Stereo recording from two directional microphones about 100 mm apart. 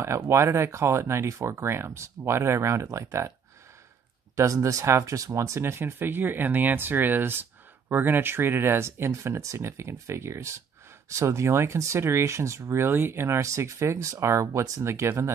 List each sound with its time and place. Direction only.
0.0 s speech: 30° right (ahead or behind)
4.4 s speech: 30° right (ahead or behind)